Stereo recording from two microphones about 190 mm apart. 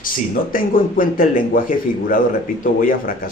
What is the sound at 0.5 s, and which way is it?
Speech, 45° left (ahead or behind).